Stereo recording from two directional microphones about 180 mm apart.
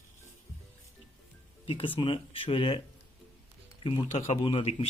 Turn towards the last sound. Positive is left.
turn(degrees=30)  # may be behind; listen again after turning